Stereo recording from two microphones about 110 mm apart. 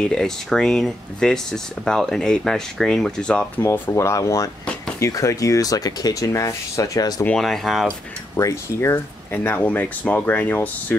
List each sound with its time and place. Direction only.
0.0 s speech: 5° left (ahead or behind)
3.6 s speech: 20° left (ahead or behind)
7.2 s speech: 5° left (ahead or behind)
8.4 s speech: 25° left (ahead or behind)